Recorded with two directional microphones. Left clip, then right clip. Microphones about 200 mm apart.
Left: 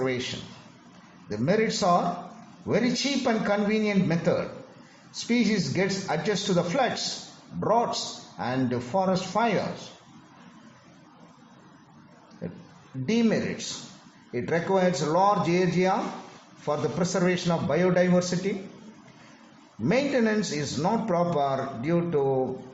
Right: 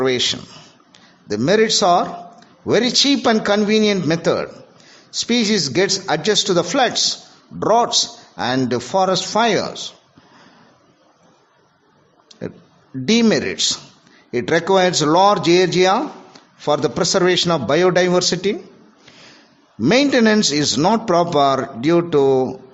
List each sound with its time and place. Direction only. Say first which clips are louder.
0.0 s a man's voice: right 11 dB; 50° right (ahead or behind)
12.4 s a man's voice: right 9 dB; 45° right (ahead or behind)
19.8 s a man's voice: right 10 dB; 40° right (ahead or behind)